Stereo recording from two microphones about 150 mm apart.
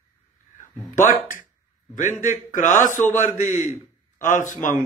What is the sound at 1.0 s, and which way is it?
A man's voice, 60° left (ahead or behind).